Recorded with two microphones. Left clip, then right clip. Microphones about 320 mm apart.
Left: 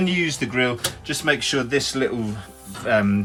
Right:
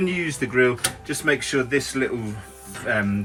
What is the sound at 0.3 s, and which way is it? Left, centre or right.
Speech, centre.